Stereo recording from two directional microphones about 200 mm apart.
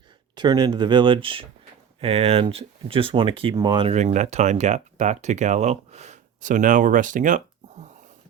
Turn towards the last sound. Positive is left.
turn(degrees=-40)  # may be behind; listen again after turning